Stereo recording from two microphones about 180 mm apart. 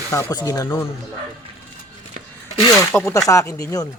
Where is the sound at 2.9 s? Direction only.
Centre (ahead or behind).